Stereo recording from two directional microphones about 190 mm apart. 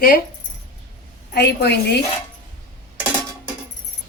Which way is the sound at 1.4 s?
60° left (ahead or behind).